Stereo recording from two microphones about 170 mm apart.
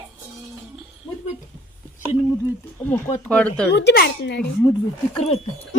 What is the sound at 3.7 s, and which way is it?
Speech, 80° left.